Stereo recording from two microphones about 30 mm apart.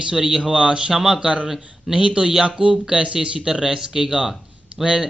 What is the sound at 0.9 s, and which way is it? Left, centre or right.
Speech, centre.